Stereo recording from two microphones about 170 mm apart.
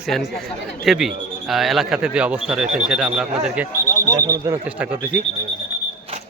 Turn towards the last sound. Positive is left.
turn(degrees=-10)  # may be behind; listen again after turning